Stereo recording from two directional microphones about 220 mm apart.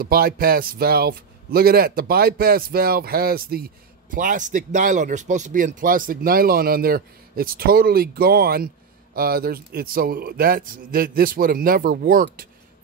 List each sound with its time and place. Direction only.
0.0 s speech: 40° right (ahead or behind)